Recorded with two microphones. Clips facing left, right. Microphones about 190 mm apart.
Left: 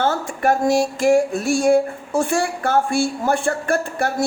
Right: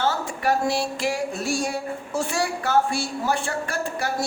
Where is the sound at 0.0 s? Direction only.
50° left (ahead or behind).